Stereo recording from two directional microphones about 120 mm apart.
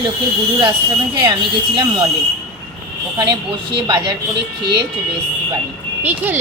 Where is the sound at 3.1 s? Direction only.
40° right (ahead or behind).